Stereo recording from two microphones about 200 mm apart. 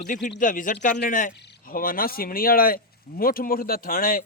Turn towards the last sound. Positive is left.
turn(degrees=45)  # may be behind; listen again after turning